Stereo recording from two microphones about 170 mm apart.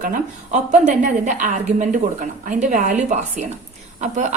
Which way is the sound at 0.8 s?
45° right (ahead or behind).